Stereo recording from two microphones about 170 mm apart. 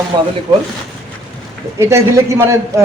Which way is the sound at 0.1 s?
25° right (ahead or behind).